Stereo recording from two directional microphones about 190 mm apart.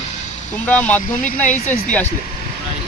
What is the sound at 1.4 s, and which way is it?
Speech, 40° left (ahead or behind).